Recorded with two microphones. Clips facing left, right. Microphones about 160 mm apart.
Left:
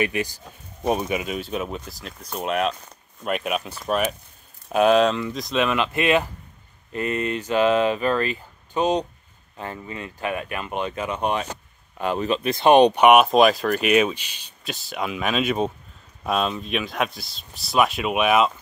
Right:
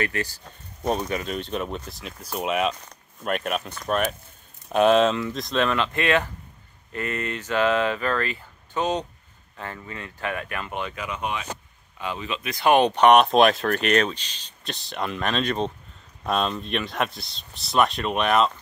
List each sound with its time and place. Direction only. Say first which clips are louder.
0.0 s speech: left 3 dB; 15° left (ahead or behind)
10.9 s speech: left 5 dB; 30° left (ahead or behind); by 12.4 s 50° left (ahead or behind)
12.4 s speech: left 4 dB; 25° left (ahead or behind); by 18.5 s 5° left (ahead or behind)